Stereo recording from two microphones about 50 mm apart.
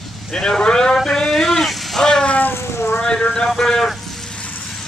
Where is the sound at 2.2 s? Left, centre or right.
Left.